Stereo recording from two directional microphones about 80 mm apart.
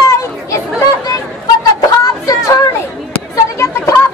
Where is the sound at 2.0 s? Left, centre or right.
Left.